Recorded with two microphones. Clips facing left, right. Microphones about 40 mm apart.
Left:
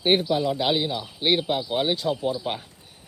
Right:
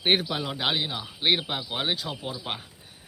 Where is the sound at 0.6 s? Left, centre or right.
Centre.